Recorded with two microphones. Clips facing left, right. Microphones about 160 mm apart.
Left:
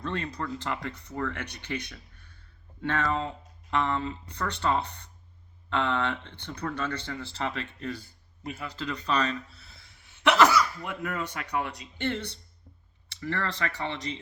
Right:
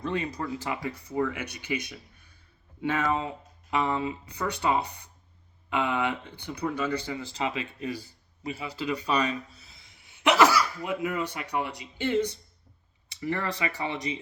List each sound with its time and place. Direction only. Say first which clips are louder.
0.0 s speech: right 2 dB; 10° right (ahead or behind)